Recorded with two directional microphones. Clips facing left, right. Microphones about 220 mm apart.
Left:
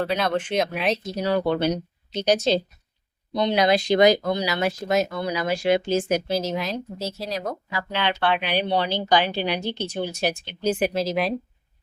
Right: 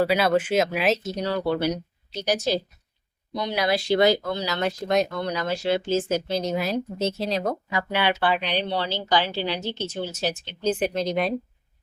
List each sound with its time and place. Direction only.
0.0 s speech: 5° right (ahead or behind)
1.0 s speech: 10° left (ahead or behind)
1.5 s speech: 20° left (ahead or behind); by 6.7 s 5° right (ahead or behind)
7.0 s speech: 25° right (ahead or behind)
7.7 s speech: 10° right (ahead or behind)